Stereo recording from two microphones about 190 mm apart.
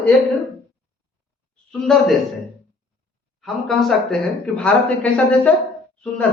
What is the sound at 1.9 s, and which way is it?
Speech, 5° left (ahead or behind).